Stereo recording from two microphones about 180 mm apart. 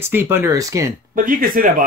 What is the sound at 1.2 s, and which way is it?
Speech, 50° right (ahead or behind).